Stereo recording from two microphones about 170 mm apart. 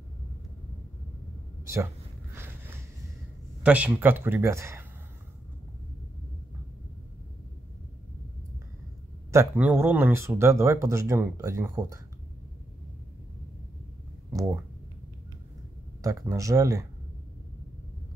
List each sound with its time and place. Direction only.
2.3 s a sound: 10° right (ahead or behind)
3.6 s speech: 10° right (ahead or behind)
9.3 s speech: 15° right (ahead or behind)
14.3 s speech: 15° right (ahead or behind)
16.0 s speech: 20° right (ahead or behind)